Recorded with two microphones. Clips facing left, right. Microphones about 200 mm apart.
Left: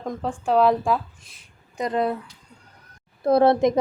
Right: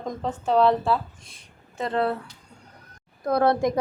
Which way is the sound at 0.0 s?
5° left (ahead or behind).